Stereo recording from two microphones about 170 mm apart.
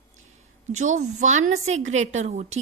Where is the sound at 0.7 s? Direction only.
45° right (ahead or behind).